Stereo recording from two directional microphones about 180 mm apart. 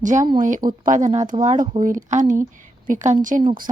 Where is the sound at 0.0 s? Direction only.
45° right (ahead or behind).